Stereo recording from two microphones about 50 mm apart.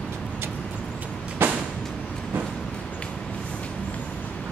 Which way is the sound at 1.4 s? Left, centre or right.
Right.